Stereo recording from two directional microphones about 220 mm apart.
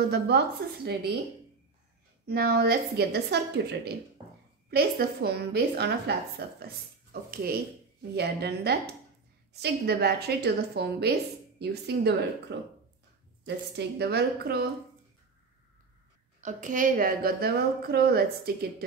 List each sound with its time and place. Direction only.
0.1 s a woman's voice: 45° right (ahead or behind)
2.2 s a woman's voice: 45° right (ahead or behind)
13.7 s a woman's voice: 50° right (ahead or behind)
16.3 s a woman's voice: 35° right (ahead or behind)